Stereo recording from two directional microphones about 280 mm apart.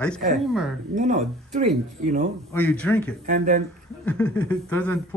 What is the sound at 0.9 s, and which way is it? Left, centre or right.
Speech, right.